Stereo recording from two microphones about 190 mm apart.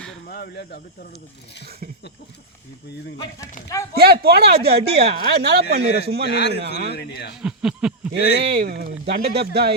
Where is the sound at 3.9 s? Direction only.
55° right (ahead or behind).